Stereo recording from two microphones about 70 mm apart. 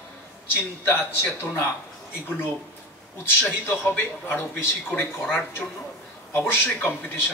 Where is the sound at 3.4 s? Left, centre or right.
Left.